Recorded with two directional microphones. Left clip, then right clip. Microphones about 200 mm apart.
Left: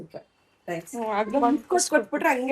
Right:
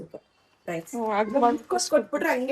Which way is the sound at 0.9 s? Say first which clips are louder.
Right 1 dB; 20° right (ahead or behind).